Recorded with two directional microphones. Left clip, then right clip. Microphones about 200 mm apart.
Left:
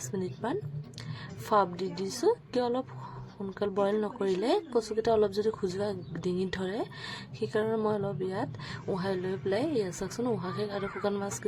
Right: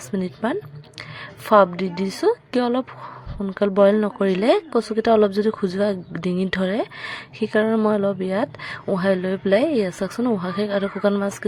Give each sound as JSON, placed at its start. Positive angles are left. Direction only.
{"t": 0.1, "sound": "speech", "side_deg": -20}